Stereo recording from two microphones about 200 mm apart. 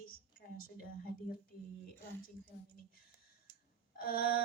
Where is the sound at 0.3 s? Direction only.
45° left (ahead or behind).